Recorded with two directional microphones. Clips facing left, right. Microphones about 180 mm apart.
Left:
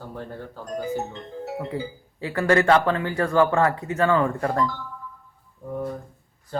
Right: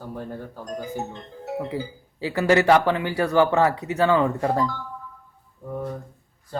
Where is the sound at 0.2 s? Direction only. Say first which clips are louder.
Right 1 dB; 15° right (ahead or behind).